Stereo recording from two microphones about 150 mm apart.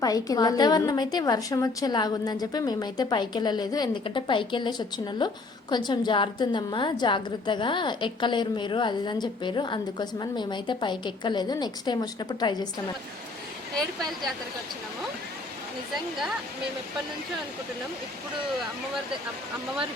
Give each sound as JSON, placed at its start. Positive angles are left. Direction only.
{"t": 0.0, "sound": "a woman's voice", "side_deg": 25}